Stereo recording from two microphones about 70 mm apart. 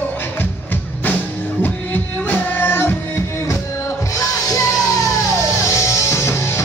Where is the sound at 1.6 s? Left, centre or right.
Left.